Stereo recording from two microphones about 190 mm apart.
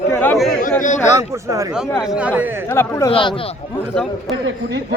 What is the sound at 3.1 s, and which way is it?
Speech, 25° left (ahead or behind).